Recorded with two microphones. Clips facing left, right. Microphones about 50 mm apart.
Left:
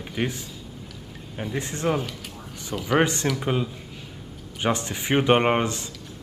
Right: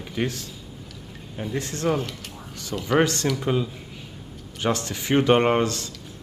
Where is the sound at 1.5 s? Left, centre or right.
Centre.